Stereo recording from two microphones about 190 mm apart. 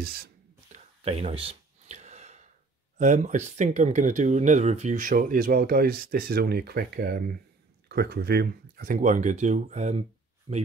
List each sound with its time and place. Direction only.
0.7 s gasp: 35° right (ahead or behind)
3.0 s speech: 40° right (ahead or behind)